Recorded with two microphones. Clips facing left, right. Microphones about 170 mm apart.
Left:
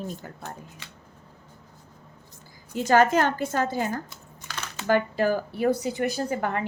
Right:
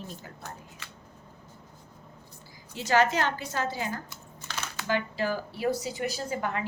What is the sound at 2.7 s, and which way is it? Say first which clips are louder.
A woman's voice: left 5 dB; 50° left (ahead or behind).